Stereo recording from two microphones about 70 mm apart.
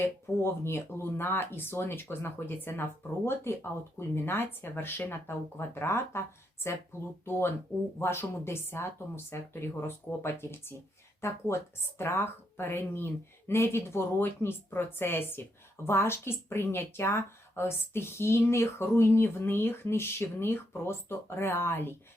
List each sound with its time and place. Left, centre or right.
0.0 s speech: left